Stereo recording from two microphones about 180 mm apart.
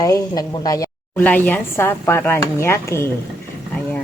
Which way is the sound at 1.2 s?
10° left (ahead or behind).